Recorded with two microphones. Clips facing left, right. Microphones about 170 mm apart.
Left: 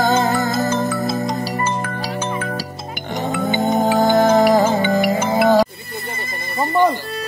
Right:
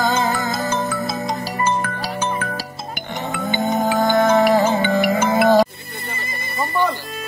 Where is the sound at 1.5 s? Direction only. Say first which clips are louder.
Right 1 dB; 45° left (ahead or behind).